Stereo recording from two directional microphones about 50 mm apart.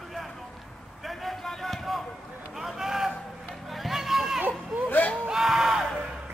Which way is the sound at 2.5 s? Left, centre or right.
Centre.